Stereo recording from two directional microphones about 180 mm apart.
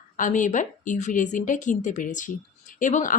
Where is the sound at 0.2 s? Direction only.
45° left (ahead or behind).